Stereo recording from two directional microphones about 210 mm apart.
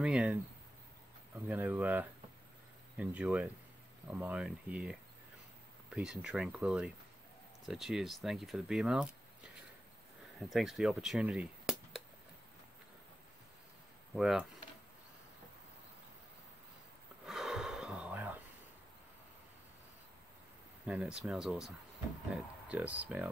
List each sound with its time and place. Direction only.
0.0 s speech: 5° right (ahead or behind)
10.5 s speech: centre (ahead or behind)
14.1 s speech: centre (ahead or behind)
17.3 s gasp: centre (ahead or behind)
20.8 s speech: 5° right (ahead or behind)